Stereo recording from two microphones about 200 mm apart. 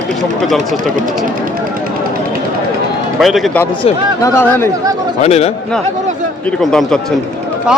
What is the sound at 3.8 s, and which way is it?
Speech, 30° left (ahead or behind).